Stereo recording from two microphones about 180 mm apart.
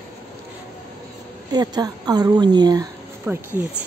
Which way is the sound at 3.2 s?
10° right (ahead or behind).